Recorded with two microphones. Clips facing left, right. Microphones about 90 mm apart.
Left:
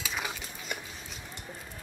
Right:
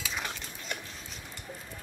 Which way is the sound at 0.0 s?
5° left (ahead or behind).